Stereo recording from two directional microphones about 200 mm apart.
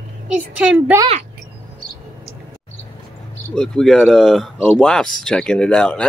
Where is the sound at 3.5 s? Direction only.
5° left (ahead or behind).